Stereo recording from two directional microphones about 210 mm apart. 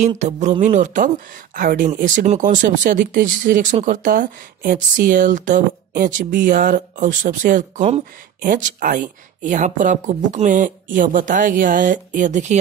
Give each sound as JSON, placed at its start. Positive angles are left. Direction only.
{"t": 0.2, "sound": "speech", "side_deg": -35}